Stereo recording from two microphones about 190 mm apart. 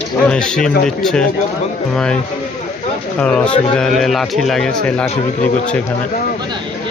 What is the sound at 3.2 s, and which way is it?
A man's voice, 5° left (ahead or behind).